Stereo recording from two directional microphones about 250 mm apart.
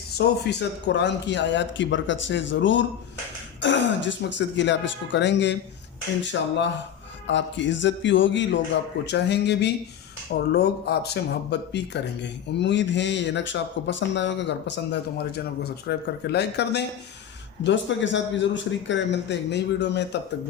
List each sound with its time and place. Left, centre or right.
0.2 s a man's voice: left